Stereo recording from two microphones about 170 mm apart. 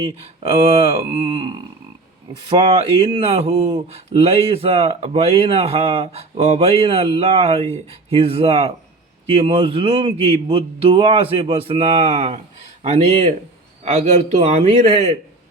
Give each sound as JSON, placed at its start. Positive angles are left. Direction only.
{"t": 0.0, "sound": "a man's voice", "side_deg": -35}